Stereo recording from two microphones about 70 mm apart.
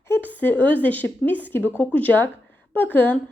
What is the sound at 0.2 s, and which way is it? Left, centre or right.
A woman's voice, left.